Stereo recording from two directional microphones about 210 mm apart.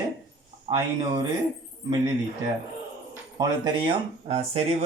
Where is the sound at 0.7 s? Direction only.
20° right (ahead or behind).